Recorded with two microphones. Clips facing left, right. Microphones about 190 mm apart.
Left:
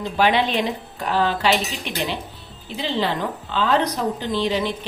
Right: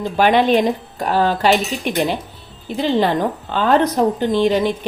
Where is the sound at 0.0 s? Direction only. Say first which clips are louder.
Right 5 dB; 50° right (ahead or behind).